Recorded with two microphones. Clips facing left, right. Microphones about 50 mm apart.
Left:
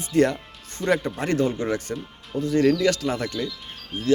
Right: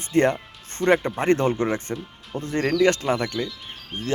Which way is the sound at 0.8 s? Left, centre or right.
Right.